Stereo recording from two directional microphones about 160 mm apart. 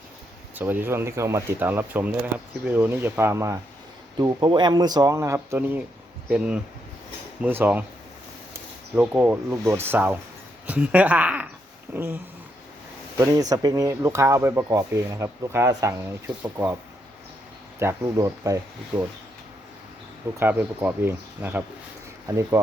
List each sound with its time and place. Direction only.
0.5 s speech: 10° right (ahead or behind)
9.0 s speech: 10° right (ahead or behind)
17.7 s speech: 20° right (ahead or behind)
20.4 s speech: 10° right (ahead or behind)